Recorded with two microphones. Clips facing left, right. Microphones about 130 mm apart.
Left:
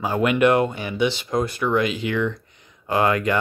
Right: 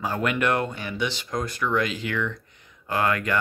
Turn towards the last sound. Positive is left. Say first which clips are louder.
# left 5 dB
turn(degrees=20)  # may be behind; listen again after turning